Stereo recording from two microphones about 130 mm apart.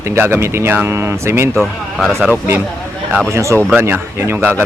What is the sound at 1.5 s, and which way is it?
Speech, centre (ahead or behind).